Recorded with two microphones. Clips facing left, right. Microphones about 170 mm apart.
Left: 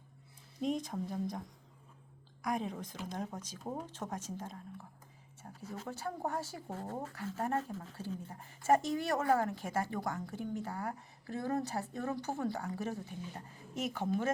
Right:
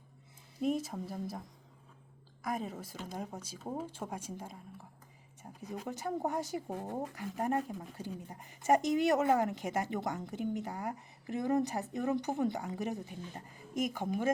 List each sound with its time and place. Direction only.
0.6 s speech: 5° right (ahead or behind)
2.4 s speech: centre (ahead or behind)